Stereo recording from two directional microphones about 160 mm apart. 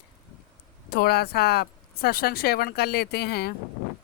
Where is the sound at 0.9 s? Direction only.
75° left (ahead or behind).